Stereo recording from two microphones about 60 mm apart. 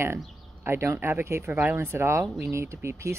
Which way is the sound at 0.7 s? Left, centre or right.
Right.